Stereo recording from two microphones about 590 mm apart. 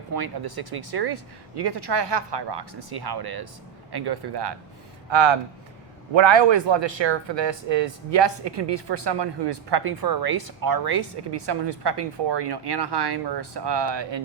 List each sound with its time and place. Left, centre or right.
0.1 s speech: right